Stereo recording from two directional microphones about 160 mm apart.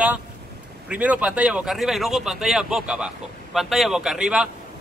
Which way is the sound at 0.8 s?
10° right (ahead or behind).